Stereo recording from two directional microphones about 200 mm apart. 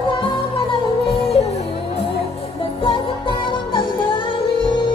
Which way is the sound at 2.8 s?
25° left (ahead or behind).